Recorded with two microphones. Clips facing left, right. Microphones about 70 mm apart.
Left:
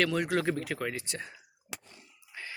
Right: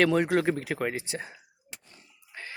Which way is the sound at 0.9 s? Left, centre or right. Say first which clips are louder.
Right 4 dB; centre.